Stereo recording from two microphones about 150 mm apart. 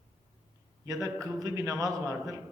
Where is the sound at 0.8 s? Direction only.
25° right (ahead or behind).